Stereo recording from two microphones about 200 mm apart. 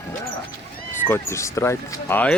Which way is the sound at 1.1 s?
15° left (ahead or behind).